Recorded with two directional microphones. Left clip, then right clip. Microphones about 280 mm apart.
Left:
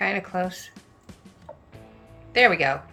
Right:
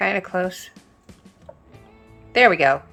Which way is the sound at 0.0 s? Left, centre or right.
Centre.